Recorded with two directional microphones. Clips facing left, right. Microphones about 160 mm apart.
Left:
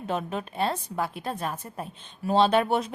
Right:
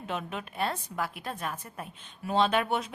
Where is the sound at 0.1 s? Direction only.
35° left (ahead or behind).